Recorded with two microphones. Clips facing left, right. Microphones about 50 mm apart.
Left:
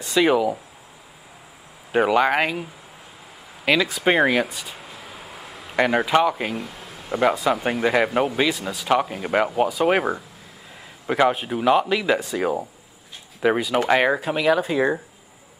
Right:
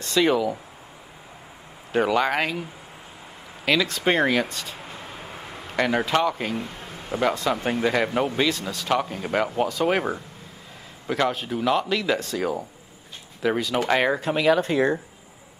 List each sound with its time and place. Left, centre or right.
0.0 s speech: centre
1.9 s speech: centre
3.6 s a sound: centre
5.8 s speech: centre